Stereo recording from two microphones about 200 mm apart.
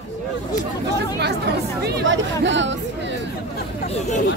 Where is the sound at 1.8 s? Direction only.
65° right (ahead or behind).